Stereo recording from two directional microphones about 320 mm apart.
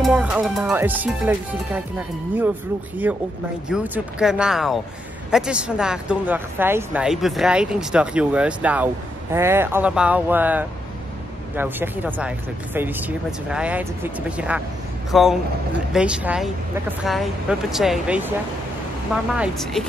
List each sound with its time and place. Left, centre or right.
0.0 s a woman's voice: centre
19.3 s a woman's voice: centre